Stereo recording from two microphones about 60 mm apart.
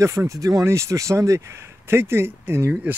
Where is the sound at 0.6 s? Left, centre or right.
Right.